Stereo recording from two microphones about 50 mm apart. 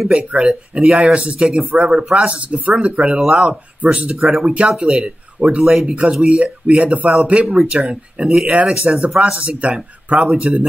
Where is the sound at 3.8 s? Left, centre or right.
Right.